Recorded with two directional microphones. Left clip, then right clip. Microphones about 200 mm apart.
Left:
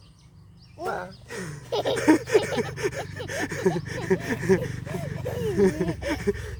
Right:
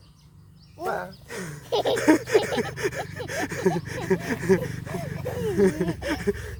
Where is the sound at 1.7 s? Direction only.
20° right (ahead or behind).